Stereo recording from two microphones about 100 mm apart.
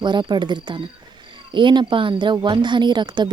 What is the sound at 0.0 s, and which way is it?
A woman's voice, 50° right (ahead or behind).